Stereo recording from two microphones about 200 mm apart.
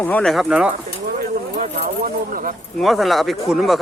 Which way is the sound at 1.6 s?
40° right (ahead or behind).